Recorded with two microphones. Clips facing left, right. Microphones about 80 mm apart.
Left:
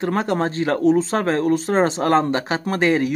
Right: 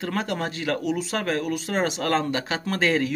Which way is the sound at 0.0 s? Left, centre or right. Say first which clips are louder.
Left 7 dB; left.